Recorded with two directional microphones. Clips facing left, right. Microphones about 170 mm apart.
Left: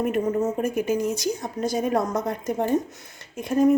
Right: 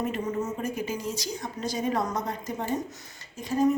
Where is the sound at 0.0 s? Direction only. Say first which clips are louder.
Left 6 dB; 50° left (ahead or behind).